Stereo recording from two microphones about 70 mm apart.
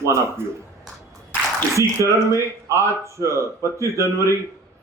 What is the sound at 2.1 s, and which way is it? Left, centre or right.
Speech, right.